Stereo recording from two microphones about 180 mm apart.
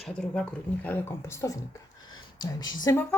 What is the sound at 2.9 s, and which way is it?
Speech, 15° left (ahead or behind).